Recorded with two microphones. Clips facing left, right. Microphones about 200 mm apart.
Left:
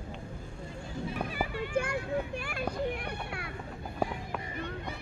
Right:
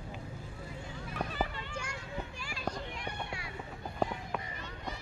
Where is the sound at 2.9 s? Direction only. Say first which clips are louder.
Left 5 dB; 60° left (ahead or behind).